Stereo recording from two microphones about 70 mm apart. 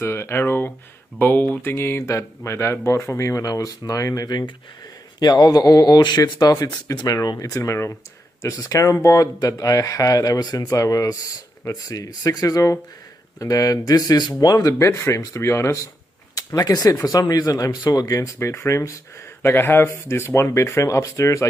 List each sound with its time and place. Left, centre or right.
0.0 s speech: left
5.2 s speech: left
6.9 s speech: left
8.5 s speech: left
10.4 s speech: left
14.9 s speech: left
16.3 s speech: left
19.4 s speech: left